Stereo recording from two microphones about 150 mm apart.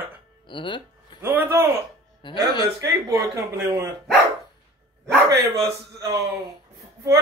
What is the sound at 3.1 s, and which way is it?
Speech, 20° right (ahead or behind).